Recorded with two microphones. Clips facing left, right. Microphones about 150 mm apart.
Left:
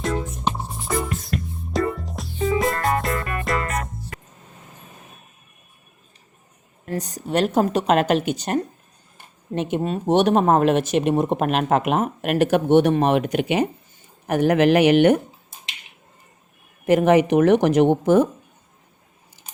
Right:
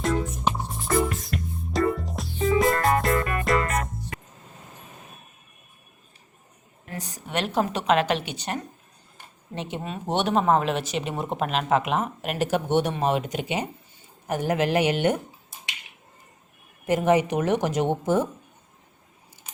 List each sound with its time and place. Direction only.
0.0 s music: centre (ahead or behind)
6.8 s speech: 40° left (ahead or behind); by 15.2 s 75° left (ahead or behind)
16.8 s speech: 75° left (ahead or behind)